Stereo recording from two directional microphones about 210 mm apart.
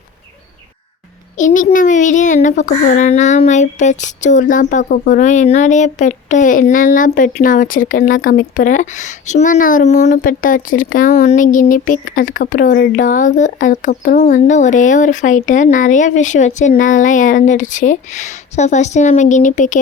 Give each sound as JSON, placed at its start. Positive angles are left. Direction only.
{"t": 1.4, "sound": "a child's voice", "side_deg": 35}